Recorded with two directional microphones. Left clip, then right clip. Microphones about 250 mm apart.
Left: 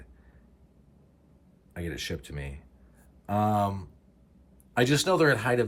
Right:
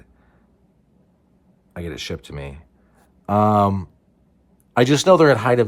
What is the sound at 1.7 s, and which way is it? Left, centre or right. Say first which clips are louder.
Speech: right 6 dB; centre.